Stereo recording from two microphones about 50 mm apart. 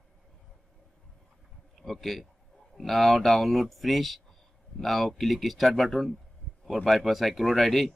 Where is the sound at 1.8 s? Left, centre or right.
Centre.